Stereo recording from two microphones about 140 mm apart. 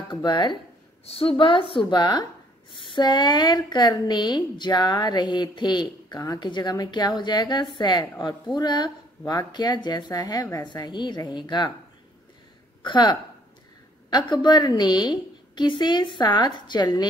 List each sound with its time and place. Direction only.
0.1 s a woman's voice: 35° left (ahead or behind)
12.8 s a woman's voice: 30° left (ahead or behind)